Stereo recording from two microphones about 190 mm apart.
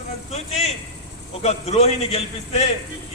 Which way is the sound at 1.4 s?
35° left (ahead or behind).